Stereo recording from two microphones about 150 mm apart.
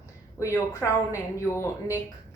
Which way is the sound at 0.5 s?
20° left (ahead or behind).